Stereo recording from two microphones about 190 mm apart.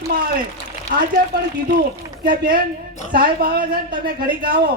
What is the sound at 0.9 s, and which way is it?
Speech, 45° right (ahead or behind).